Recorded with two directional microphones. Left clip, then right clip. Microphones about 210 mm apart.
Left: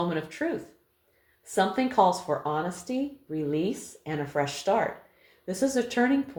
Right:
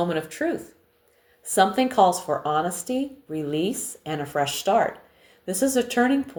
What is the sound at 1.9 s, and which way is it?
Speech, 40° right (ahead or behind).